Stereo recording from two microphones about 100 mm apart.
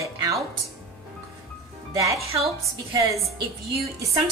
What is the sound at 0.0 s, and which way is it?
Music, 35° right (ahead or behind).